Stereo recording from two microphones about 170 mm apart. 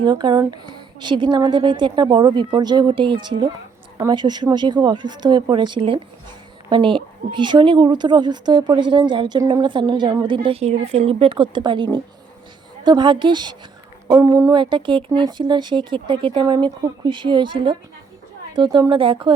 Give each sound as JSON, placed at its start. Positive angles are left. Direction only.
{"t": 0.0, "sound": "speech", "side_deg": -25}